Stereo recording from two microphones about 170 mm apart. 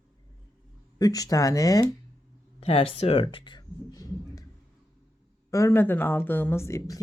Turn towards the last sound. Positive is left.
turn(degrees=20)  # may be behind; listen again after turning